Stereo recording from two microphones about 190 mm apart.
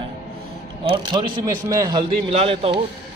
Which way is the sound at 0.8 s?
25° right (ahead or behind).